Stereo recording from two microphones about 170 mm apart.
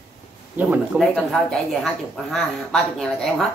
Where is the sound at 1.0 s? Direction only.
Centre (ahead or behind).